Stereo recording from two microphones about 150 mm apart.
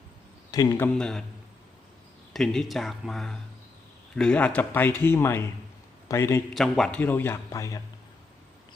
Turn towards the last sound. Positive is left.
turn(degrees=20)  # may be behind; listen again after turning